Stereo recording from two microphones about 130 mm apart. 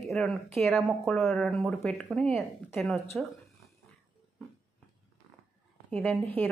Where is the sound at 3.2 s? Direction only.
5° left (ahead or behind).